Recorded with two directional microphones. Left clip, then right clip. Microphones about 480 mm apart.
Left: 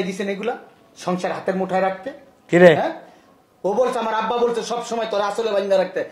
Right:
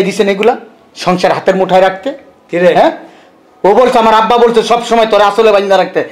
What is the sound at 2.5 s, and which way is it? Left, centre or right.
Speech, left.